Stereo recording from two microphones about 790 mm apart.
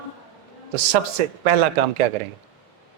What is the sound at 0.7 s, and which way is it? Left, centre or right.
Speech, right.